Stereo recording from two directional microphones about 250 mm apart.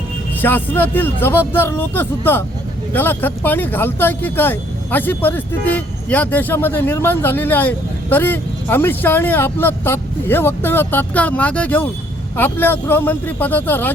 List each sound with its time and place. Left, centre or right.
0.4 s speech: centre